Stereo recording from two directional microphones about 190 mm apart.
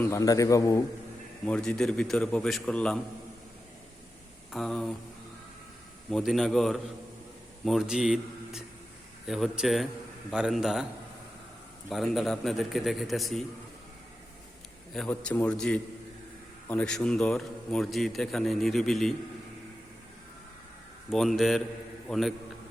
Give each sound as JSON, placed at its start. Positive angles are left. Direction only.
{"t": 0.0, "sound": "a man's voice", "side_deg": 15}
{"t": 1.5, "sound": "a man's voice", "side_deg": 5}
{"t": 4.5, "sound": "a man's voice", "side_deg": 0}
{"t": 6.1, "sound": "a man's voice", "side_deg": 0}
{"t": 11.9, "sound": "a man's voice", "side_deg": 0}
{"t": 14.9, "sound": "a man's voice", "side_deg": 5}
{"t": 21.1, "sound": "a man's voice", "side_deg": 0}